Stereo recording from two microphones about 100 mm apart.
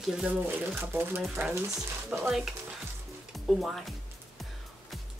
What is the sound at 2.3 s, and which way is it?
Speech, 5° right (ahead or behind).